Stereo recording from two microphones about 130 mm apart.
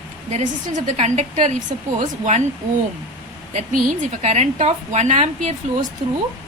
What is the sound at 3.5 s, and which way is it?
A woman's voice, 65° right (ahead or behind).